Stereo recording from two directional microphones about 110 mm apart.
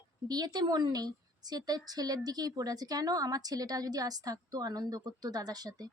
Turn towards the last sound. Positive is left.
turn(degrees=-35)  # may be behind; listen again after turning